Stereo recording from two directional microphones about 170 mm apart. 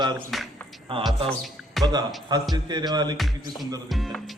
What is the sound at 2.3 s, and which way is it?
Speech, 25° right (ahead or behind).